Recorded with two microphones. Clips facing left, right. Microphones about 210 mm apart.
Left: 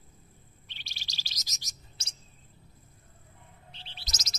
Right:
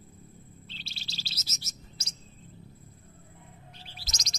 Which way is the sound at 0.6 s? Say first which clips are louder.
Right 7 dB; 15° left (ahead or behind).